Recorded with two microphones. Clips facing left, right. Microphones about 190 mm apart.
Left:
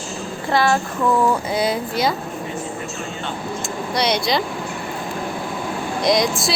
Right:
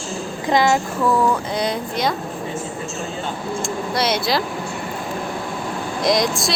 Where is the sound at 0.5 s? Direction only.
15° right (ahead or behind).